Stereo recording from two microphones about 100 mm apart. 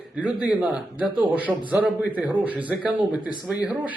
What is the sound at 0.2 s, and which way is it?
A man's voice, 10° right (ahead or behind).